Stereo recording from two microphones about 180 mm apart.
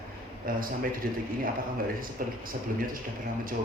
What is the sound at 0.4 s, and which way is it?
Speech, 50° right (ahead or behind).